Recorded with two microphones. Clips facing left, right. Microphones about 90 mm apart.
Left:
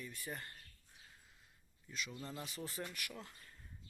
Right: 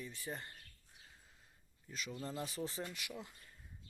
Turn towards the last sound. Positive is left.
turn(degrees=-15)  # may be behind; listen again after turning